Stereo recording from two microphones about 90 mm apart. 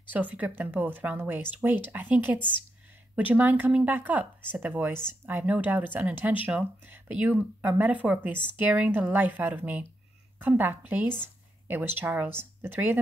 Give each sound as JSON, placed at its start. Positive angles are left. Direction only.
{"t": 0.1, "sound": "speech", "side_deg": -20}